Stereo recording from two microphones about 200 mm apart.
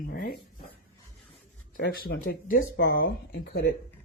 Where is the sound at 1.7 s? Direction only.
50° left (ahead or behind).